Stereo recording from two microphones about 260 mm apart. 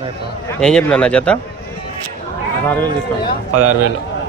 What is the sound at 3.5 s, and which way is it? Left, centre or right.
Speech, right.